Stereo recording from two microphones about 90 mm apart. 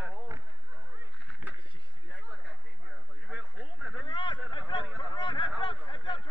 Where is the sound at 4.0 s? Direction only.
65° left (ahead or behind).